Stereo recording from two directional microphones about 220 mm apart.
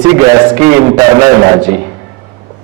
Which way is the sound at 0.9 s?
15° right (ahead or behind).